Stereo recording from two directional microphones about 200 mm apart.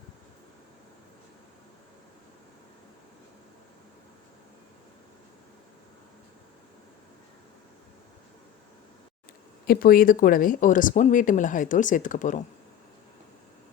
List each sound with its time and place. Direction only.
9.6 s speech: 45° left (ahead or behind)